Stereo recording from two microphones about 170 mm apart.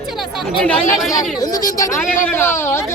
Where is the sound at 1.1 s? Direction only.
20° left (ahead or behind).